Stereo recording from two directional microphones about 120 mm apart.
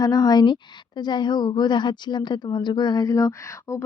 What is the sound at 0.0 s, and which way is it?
Speech, 30° left (ahead or behind).